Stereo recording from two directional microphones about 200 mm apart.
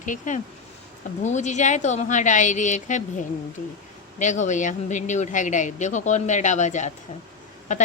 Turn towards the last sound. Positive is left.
turn(degrees=35)  # may be behind; listen again after turning